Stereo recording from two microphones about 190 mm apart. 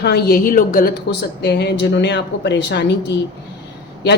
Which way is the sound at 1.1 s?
60° left (ahead or behind).